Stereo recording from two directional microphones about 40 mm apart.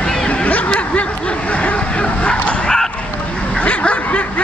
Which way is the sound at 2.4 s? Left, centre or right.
Left.